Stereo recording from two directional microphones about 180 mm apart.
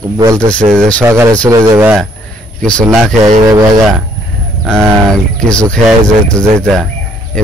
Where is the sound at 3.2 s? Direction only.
20° right (ahead or behind).